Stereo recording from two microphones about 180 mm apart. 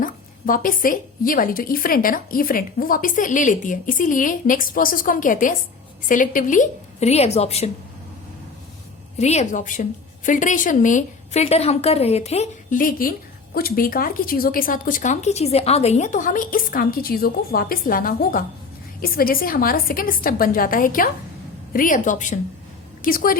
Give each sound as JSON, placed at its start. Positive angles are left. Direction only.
{"t": 0.0, "sound": "a woman's voice", "side_deg": 50}
{"t": 9.1, "sound": "a woman's voice", "side_deg": 40}